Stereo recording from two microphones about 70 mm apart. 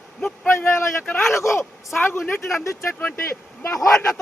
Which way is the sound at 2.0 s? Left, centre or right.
Left.